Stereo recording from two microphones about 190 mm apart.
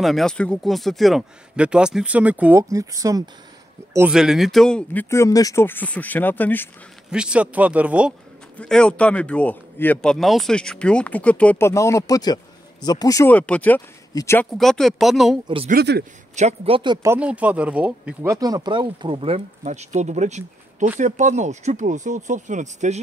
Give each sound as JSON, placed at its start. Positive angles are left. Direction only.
{"t": 0.0, "sound": "speech", "side_deg": 0}
{"t": 3.9, "sound": "speech", "side_deg": -5}
{"t": 7.1, "sound": "speech", "side_deg": -5}
{"t": 8.5, "sound": "speech", "side_deg": 5}
{"t": 14.5, "sound": "speech", "side_deg": 0}
{"t": 15.4, "sound": "a man's voice", "side_deg": -30}
{"t": 15.7, "sound": "speech", "side_deg": -55}
{"t": 16.3, "sound": "a man's voice", "side_deg": -35}